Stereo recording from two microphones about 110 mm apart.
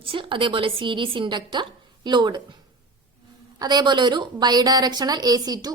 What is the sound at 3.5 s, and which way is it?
A woman's voice, 40° right (ahead or behind).